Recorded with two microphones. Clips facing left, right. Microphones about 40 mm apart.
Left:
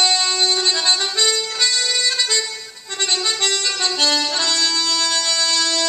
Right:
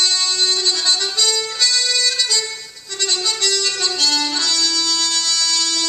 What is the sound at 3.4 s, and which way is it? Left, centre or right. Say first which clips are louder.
Music: even; centre.